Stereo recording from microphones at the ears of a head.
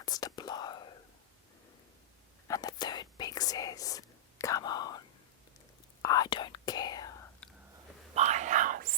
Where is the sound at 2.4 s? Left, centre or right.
Left.